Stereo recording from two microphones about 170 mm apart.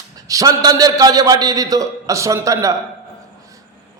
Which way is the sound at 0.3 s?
20° right (ahead or behind).